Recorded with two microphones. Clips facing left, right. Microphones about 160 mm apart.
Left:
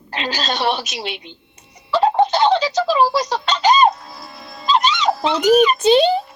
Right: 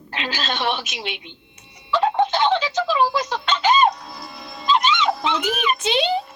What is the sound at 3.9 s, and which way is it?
Music, centre (ahead or behind).